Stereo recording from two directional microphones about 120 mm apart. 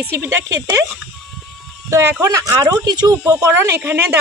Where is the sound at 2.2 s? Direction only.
30° right (ahead or behind).